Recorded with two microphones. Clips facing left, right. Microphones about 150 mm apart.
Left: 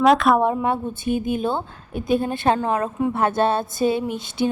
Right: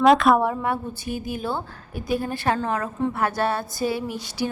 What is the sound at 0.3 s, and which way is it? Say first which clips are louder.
Speech: left 3 dB; 20° left (ahead or behind).